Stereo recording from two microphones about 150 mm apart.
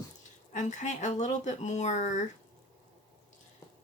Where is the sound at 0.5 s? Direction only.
55° left (ahead or behind).